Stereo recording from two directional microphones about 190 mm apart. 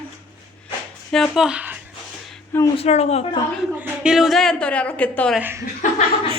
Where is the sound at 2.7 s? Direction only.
35° left (ahead or behind).